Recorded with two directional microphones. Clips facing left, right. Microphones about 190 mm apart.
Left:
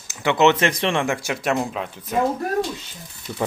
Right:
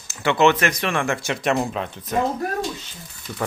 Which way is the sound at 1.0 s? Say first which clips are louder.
Even; 10° left (ahead or behind).